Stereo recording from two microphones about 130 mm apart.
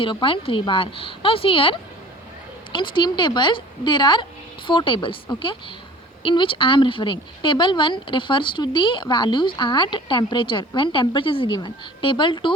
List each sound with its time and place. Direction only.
0.0 s a woman's voice: 40° left (ahead or behind)